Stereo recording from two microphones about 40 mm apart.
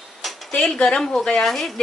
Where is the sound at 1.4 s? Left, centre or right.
Centre.